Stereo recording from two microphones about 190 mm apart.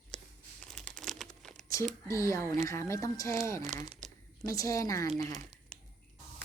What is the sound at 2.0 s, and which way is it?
A woman's voice, 15° left (ahead or behind).